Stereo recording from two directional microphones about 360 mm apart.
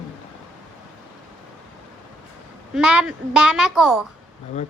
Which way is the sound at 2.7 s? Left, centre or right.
Centre.